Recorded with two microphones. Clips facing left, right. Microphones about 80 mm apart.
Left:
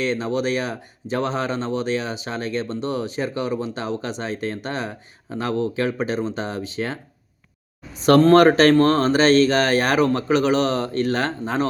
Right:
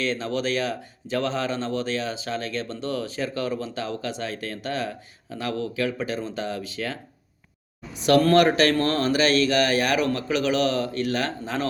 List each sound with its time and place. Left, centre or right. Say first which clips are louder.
0.0 s speech: left 4 dB; left
8.0 s speech: left 5 dB; left